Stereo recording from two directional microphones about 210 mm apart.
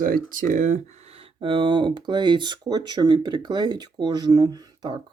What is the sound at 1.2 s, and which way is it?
Speech, 25° right (ahead or behind).